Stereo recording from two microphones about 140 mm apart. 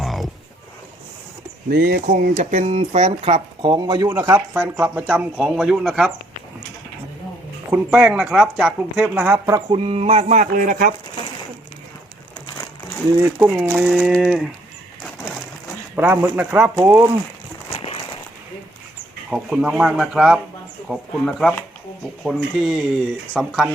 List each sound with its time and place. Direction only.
0.0 s roaring cats: centre (ahead or behind)
1.7 s speech: 90° right; by 4.4 s 20° right (ahead or behind)
4.5 s speech: 10° right (ahead or behind)
7.7 s speech: 10° right (ahead or behind)
9.6 s speech: 40° right (ahead or behind); by 10.9 s 70° right (ahead or behind)
13.4 s speech: 10° right (ahead or behind)
16.0 s speech: 15° right (ahead or behind)
19.3 s speech: 5° right (ahead or behind)